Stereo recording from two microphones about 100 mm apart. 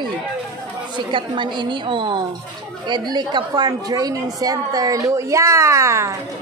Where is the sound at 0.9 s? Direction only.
55° right (ahead or behind); by 6.1 s 30° right (ahead or behind).